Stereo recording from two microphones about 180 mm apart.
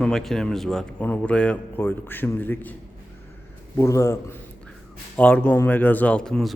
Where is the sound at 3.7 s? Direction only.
15° left (ahead or behind).